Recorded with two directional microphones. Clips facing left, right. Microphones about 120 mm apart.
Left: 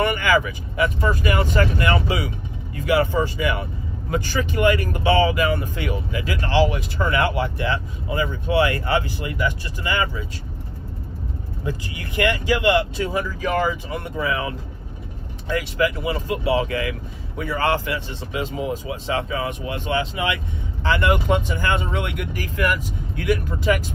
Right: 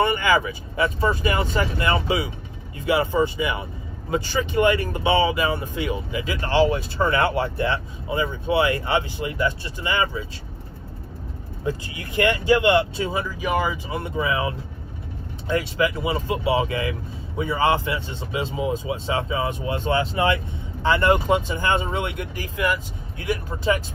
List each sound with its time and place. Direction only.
0.0 s speech: 25° right (ahead or behind)
11.6 s speech: 25° right (ahead or behind)